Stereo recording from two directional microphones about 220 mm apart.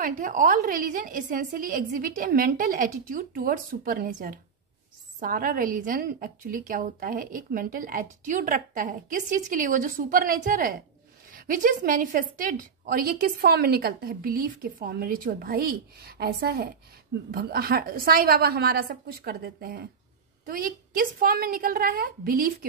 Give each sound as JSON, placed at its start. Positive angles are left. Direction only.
{"t": 0.0, "sound": "a woman's voice", "side_deg": -35}